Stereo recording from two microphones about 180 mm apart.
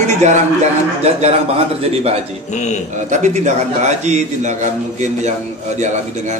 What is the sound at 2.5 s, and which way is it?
Speech, 40° left (ahead or behind).